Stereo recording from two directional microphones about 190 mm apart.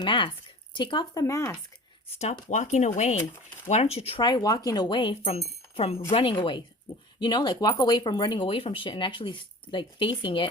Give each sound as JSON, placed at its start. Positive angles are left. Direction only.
{"t": 0.0, "sound": "speech", "side_deg": 25}
{"t": 2.1, "sound": "speech", "side_deg": 40}